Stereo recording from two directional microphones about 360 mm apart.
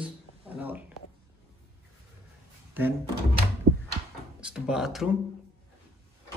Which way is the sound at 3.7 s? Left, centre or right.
Right.